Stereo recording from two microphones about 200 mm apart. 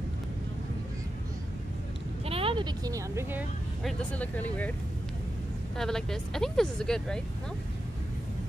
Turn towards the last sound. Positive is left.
turn(degrees=5)  # may be behind; listen again after turning